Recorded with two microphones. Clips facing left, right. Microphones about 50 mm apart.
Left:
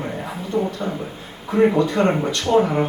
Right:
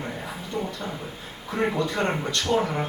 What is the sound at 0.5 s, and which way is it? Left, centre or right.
Speech, centre.